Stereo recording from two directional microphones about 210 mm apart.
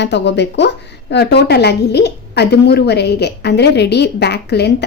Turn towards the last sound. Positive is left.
turn(degrees=50)  # may be behind; listen again after turning